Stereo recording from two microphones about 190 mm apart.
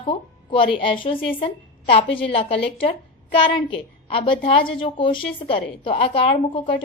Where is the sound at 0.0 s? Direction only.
25° left (ahead or behind).